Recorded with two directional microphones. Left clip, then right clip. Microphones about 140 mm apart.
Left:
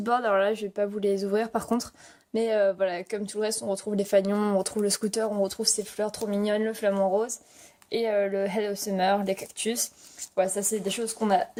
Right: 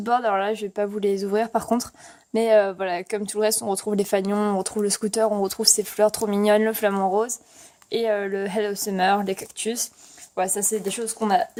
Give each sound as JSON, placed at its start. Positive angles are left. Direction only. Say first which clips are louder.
{"t": 0.0, "sound": "speech", "louder": "right 2 dB", "side_deg": -10}
{"t": 2.3, "sound": "speech", "louder": "right 6 dB", "side_deg": -30}
{"t": 9.6, "sound": "speech", "louder": "right 2 dB", "side_deg": -15}